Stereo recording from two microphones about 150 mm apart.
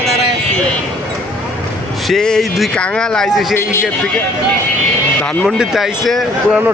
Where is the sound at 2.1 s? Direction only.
5° left (ahead or behind).